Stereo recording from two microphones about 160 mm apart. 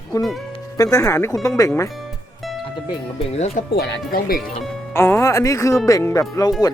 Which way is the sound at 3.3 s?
40° left (ahead or behind).